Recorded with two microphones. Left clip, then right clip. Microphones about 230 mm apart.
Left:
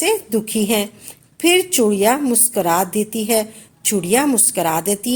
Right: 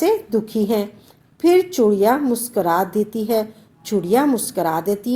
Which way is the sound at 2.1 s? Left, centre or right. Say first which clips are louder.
Left 1 dB; left.